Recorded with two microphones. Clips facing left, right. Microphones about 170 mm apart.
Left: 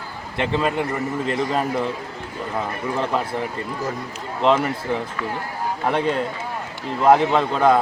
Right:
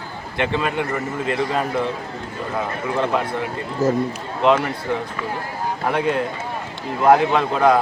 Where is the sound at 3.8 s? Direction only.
45° right (ahead or behind).